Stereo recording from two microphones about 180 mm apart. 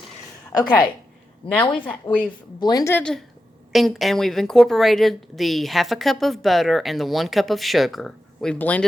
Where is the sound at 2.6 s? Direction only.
20° left (ahead or behind).